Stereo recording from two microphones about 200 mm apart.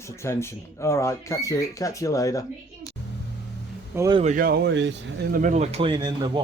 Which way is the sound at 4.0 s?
20° right (ahead or behind).